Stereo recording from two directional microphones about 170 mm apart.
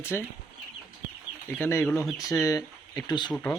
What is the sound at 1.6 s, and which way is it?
Speech, 10° left (ahead or behind).